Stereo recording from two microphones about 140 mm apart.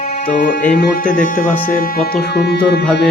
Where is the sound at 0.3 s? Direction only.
70° left (ahead or behind).